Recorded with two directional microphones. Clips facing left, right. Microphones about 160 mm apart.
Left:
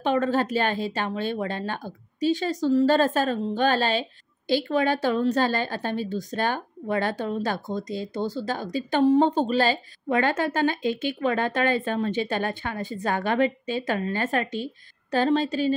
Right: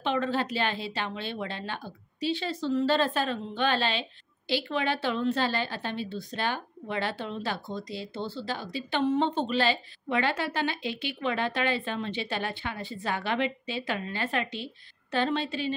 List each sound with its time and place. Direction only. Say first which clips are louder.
0.0 s a woman's voice: left 5 dB; 45° left (ahead or behind)